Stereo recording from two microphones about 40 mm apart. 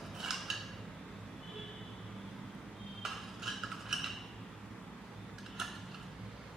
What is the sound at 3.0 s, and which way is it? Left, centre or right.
Cutlery, centre.